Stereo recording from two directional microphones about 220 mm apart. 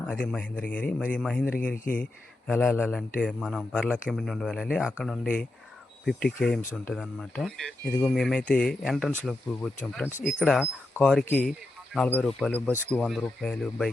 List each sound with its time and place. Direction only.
0.3 s speech: 5° left (ahead or behind)
10.1 s speech: 35° left (ahead or behind)
10.4 s speech: 5° left (ahead or behind)